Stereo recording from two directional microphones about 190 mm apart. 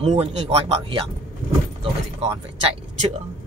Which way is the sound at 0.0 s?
35° right (ahead or behind).